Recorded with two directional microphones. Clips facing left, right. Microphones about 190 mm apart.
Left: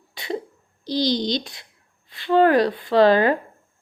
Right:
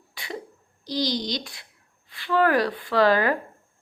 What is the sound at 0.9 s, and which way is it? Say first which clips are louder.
A child's voice: left 5 dB; 25° left (ahead or behind).